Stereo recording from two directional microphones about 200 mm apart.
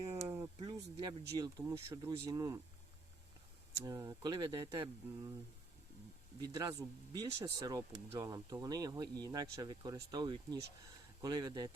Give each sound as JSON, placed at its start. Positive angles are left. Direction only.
{"t": 0.2, "sound": "a sound", "side_deg": -15}
{"t": 1.4, "sound": "speech", "side_deg": -15}
{"t": 3.8, "sound": "speech", "side_deg": -15}
{"t": 6.4, "sound": "speech", "side_deg": -20}